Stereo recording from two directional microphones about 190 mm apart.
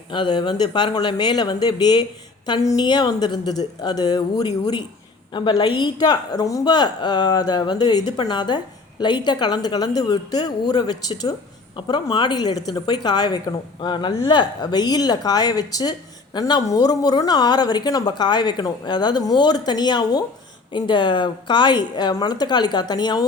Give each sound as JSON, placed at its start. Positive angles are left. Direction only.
{"t": 0.1, "sound": "a woman's voice", "side_deg": 25}